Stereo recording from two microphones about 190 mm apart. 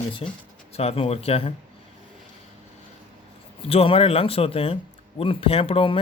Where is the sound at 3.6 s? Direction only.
30° left (ahead or behind).